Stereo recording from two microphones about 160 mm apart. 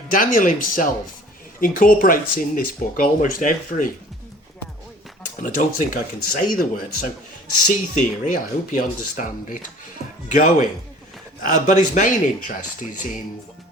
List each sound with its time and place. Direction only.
0.1 s speech: 60° left (ahead or behind)
5.4 s speech: 55° left (ahead or behind)